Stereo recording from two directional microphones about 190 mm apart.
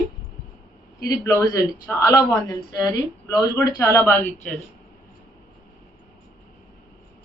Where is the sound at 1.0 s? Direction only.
15° left (ahead or behind).